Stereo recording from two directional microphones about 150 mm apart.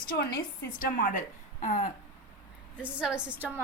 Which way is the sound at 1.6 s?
60° left (ahead or behind).